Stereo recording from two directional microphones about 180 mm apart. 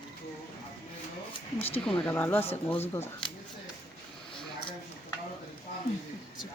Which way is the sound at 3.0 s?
25° left (ahead or behind).